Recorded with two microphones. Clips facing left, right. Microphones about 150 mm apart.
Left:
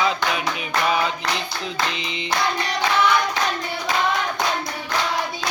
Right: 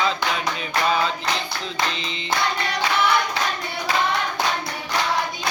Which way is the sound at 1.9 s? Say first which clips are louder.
Even; 15° left (ahead or behind).